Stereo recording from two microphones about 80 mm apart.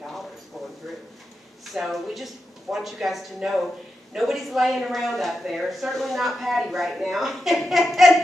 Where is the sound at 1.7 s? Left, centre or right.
Centre.